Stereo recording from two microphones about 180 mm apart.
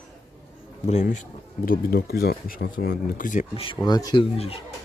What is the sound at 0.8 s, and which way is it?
Speech, 40° left (ahead or behind).